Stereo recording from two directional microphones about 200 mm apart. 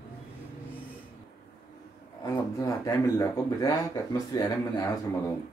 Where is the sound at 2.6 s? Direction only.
15° left (ahead or behind).